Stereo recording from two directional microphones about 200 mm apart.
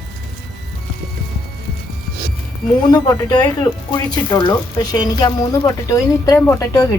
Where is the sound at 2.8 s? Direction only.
20° left (ahead or behind).